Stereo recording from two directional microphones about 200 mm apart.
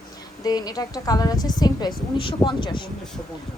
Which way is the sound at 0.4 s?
20° left (ahead or behind).